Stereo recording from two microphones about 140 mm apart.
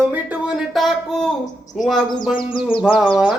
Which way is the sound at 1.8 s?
Centre (ahead or behind).